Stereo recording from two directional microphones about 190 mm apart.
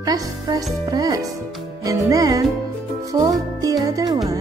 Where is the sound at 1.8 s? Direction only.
20° right (ahead or behind).